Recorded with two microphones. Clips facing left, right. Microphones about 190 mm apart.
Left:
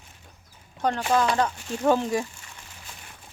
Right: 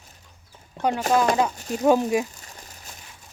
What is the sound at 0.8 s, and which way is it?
Speech, 10° right (ahead or behind).